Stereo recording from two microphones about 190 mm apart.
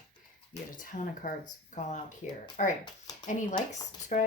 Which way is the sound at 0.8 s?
45° left (ahead or behind).